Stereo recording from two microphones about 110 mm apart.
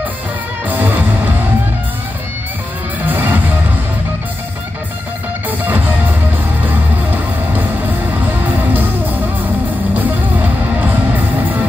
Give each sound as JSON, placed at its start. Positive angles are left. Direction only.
{"t": 0.7, "sound": "music", "side_deg": -15}
{"t": 3.1, "sound": "music", "side_deg": -15}
{"t": 6.6, "sound": "music", "side_deg": -15}
{"t": 9.9, "sound": "music", "side_deg": -15}